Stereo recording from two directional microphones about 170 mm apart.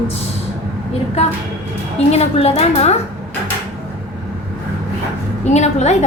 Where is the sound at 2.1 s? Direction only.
40° left (ahead or behind).